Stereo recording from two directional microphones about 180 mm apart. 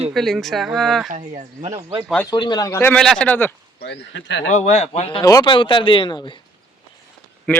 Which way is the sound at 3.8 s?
75° left (ahead or behind).